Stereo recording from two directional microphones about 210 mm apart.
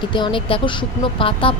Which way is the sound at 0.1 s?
25° left (ahead or behind).